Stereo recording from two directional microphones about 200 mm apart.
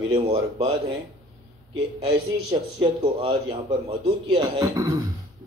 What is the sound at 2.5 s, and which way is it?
A man's voice, 25° right (ahead or behind).